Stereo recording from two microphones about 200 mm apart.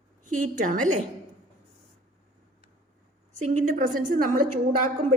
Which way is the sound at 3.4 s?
40° right (ahead or behind).